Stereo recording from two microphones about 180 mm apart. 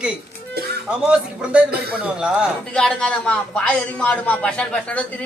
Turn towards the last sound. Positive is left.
turn(degrees=5)  # may be behind; listen again after turning